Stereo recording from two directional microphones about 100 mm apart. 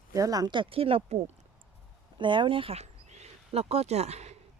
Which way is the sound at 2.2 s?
55° right (ahead or behind).